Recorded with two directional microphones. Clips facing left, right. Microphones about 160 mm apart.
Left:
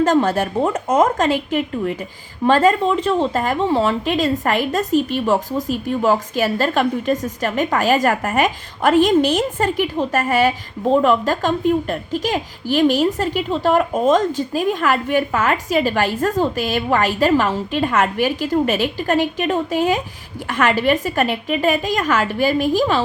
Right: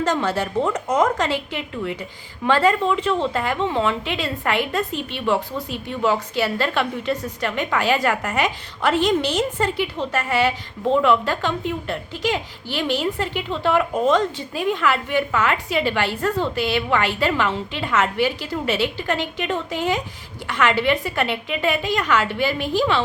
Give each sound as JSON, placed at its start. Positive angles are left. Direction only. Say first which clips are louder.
{"t": 0.0, "sound": "a woman's voice", "louder": "left 6 dB", "side_deg": 50}